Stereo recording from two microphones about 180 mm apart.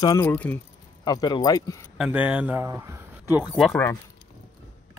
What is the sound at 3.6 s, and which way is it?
Speech, centre (ahead or behind).